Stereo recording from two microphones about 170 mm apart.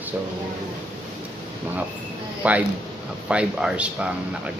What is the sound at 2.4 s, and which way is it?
Speech, 10° right (ahead or behind).